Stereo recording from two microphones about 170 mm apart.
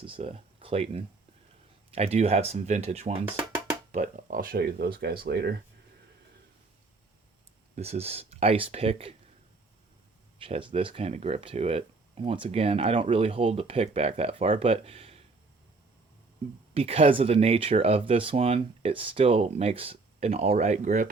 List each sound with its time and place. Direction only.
0.0 s speech: 35° right (ahead or behind)
3.2 s music: 10° right (ahead or behind)
3.9 s speech: 50° right (ahead or behind); by 5.5 s 75° right (ahead or behind)
7.8 s speech: 40° right (ahead or behind)
10.4 s speech: 30° right (ahead or behind)
16.7 s speech: 35° right (ahead or behind)